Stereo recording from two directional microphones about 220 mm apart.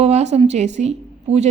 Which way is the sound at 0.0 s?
30° right (ahead or behind).